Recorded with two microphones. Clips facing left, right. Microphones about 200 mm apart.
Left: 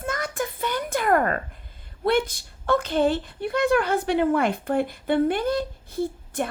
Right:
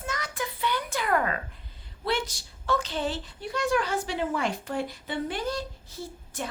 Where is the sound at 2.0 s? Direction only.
55° left (ahead or behind).